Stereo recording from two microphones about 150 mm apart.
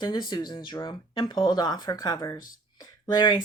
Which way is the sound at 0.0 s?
30° left (ahead or behind).